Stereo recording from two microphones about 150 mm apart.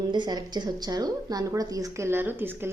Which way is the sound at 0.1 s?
30° right (ahead or behind).